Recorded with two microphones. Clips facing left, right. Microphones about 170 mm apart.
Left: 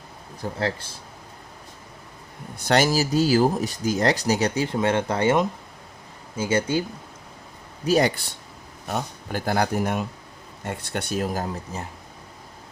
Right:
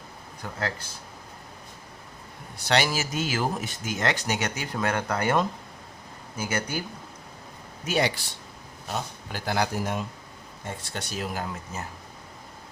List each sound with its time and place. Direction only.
0.4 s speech: 30° left (ahead or behind)
2.6 s speech: 45° left (ahead or behind); by 6.8 s 25° left (ahead or behind)
7.9 s speech: 45° left (ahead or behind)
11.4 s speech: 30° left (ahead or behind)